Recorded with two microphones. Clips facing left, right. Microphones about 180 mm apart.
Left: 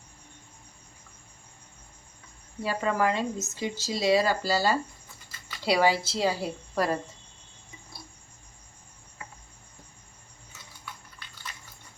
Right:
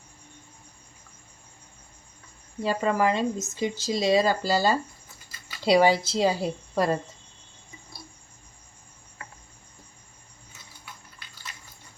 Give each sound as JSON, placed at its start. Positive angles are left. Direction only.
{"t": 2.6, "sound": "speech", "side_deg": -20}